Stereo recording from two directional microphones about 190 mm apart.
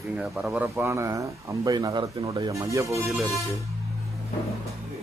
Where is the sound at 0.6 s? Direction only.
15° right (ahead or behind).